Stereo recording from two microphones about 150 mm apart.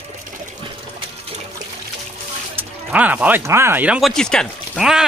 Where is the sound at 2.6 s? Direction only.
10° right (ahead or behind).